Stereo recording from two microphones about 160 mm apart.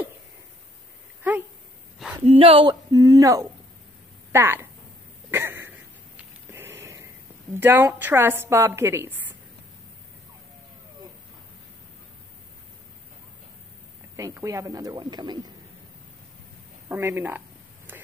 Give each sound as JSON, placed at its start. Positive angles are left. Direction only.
{"t": 2.2, "sound": "speech", "side_deg": -35}
{"t": 5.3, "sound": "a sound", "side_deg": -15}
{"t": 7.6, "sound": "a woman's voice", "side_deg": -15}
{"t": 14.1, "sound": "speech", "side_deg": -20}
{"t": 16.9, "sound": "a woman's voice", "side_deg": -15}